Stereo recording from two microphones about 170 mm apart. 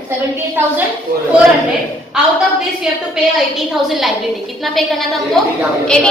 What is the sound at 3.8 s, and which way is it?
A woman's voice, centre (ahead or behind).